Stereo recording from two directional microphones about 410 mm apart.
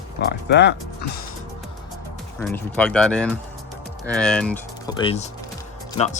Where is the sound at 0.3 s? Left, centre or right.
Left.